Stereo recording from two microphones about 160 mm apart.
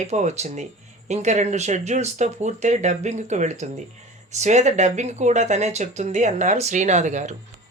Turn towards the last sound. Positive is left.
turn(degrees=-45)  # may be behind; listen again after turning